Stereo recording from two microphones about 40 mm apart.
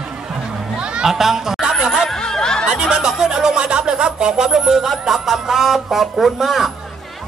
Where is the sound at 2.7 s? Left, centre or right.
Centre.